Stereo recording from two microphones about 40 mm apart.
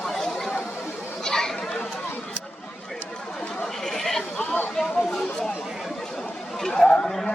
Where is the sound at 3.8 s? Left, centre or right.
Centre.